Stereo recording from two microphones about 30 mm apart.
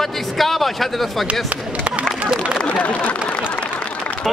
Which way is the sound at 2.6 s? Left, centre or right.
Left.